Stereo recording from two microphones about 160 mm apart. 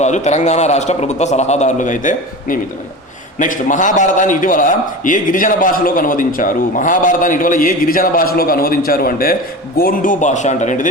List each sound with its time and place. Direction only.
0.0 s a man's voice: 45° left (ahead or behind)